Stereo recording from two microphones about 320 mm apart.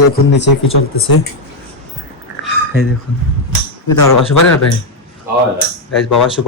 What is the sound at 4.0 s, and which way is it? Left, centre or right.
Speech, left.